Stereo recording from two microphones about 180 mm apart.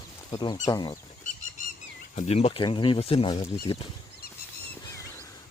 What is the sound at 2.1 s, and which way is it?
Speech, 35° left (ahead or behind).